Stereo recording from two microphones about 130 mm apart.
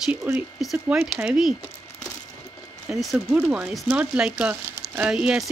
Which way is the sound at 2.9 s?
Centre (ahead or behind).